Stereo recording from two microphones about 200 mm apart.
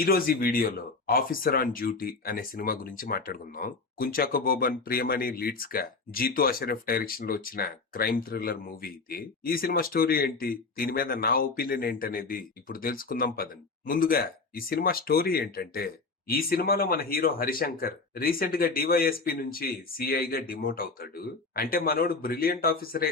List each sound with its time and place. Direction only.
0.0 s speech: 45° left (ahead or behind)